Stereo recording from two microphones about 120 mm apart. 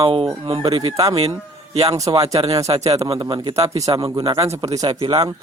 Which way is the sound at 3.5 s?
30° right (ahead or behind).